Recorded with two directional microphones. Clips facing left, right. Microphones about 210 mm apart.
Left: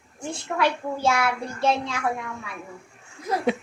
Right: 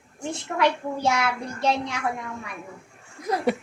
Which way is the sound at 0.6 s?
20° right (ahead or behind).